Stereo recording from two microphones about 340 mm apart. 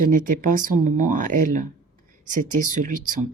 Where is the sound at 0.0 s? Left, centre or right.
Right.